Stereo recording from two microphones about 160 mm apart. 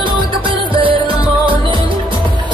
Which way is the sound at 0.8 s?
30° right (ahead or behind).